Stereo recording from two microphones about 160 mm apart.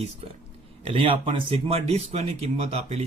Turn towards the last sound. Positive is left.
turn(degrees=-40)  # may be behind; listen again after turning